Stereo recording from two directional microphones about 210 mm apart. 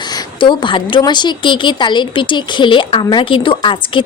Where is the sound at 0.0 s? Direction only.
20° left (ahead or behind).